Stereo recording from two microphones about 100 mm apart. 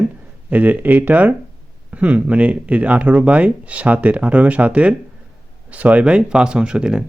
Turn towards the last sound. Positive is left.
turn(degrees=-10)  # may be behind; listen again after turning